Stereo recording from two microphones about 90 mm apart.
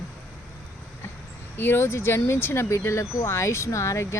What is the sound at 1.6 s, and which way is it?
Speech, 25° left (ahead or behind).